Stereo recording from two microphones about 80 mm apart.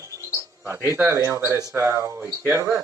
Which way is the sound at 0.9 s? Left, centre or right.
Right.